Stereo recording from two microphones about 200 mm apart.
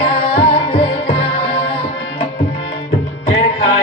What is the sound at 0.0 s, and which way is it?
Music, 30° left (ahead or behind).